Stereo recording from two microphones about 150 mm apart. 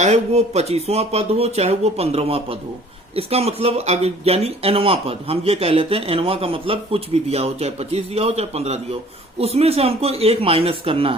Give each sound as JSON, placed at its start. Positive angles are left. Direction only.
{"t": 0.0, "sound": "speech", "side_deg": -50}